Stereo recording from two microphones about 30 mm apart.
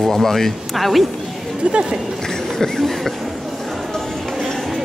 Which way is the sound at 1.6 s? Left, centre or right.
Right.